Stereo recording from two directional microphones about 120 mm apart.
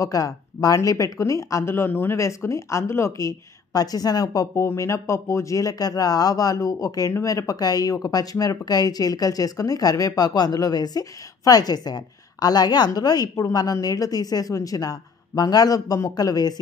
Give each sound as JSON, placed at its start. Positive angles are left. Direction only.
{"t": 0.0, "sound": "speech", "side_deg": 30}